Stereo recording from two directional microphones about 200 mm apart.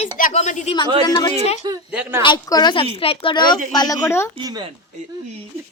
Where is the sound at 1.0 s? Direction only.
20° left (ahead or behind).